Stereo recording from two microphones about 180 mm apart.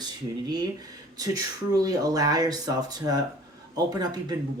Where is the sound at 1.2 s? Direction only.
20° right (ahead or behind).